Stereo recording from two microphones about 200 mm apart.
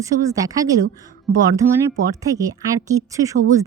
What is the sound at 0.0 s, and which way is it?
Speech, 15° right (ahead or behind).